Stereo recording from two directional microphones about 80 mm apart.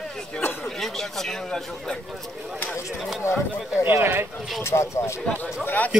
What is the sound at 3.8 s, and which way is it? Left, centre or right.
Speech, right.